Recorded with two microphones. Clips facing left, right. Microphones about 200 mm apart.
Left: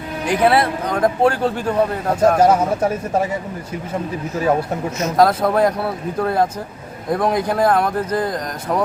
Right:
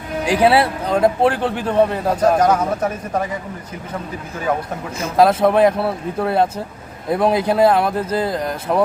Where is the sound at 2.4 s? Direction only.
25° left (ahead or behind).